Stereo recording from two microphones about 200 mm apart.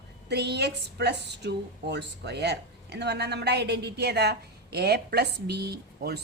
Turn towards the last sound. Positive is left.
turn(degrees=-55)  # may be behind; listen again after turning